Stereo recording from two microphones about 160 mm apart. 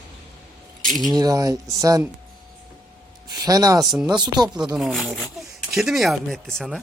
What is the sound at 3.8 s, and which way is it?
Speech, centre (ahead or behind).